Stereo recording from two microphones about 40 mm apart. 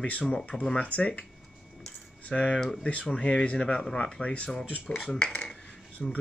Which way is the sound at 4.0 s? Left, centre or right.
Left.